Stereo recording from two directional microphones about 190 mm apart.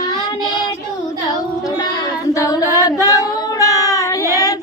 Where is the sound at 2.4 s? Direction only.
20° left (ahead or behind).